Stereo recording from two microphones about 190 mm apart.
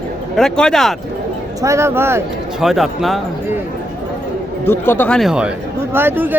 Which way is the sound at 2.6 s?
Centre (ahead or behind).